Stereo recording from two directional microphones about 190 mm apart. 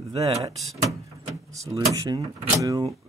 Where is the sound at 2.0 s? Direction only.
15° right (ahead or behind).